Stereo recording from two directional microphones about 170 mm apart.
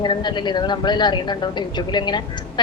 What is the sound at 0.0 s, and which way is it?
A woman's voice, 25° left (ahead or behind).